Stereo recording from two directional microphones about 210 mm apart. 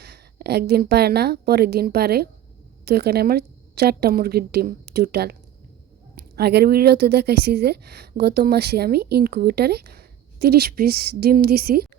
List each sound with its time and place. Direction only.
0.0 s a woman's voice: 50° right (ahead or behind)